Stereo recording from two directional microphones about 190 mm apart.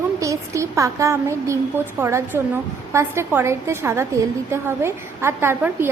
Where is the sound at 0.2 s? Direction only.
15° right (ahead or behind).